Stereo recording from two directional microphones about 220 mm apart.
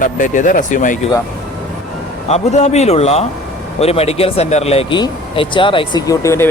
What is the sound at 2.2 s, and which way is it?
Speech, 30° left (ahead or behind).